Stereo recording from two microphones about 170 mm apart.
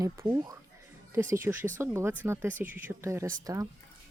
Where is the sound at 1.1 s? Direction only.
15° right (ahead or behind).